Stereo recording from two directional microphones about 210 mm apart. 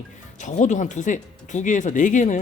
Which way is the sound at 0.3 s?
35° left (ahead or behind).